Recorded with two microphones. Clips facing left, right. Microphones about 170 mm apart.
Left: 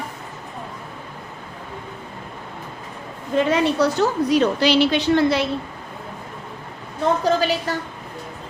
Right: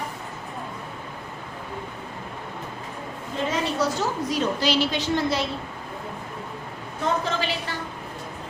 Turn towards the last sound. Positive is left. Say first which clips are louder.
# left 8 dB
turn(degrees=40)  # may be behind; listen again after turning